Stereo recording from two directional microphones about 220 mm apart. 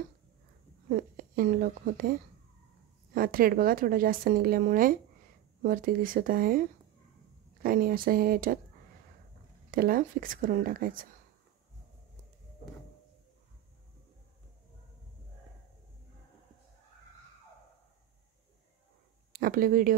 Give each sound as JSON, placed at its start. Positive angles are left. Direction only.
{"t": 0.8, "sound": "speech", "side_deg": -40}
{"t": 3.2, "sound": "speech", "side_deg": -40}
{"t": 9.7, "sound": "speech", "side_deg": -40}
{"t": 19.3, "sound": "speech", "side_deg": -40}